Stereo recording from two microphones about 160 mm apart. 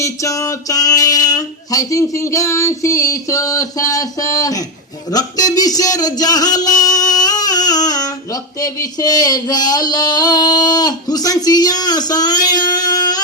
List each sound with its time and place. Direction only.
0.0 s speech: 20° left (ahead or behind)